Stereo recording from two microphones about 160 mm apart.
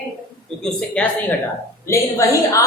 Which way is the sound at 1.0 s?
5° left (ahead or behind).